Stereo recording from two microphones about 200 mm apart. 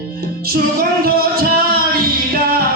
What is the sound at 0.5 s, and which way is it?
Music, 50° right (ahead or behind).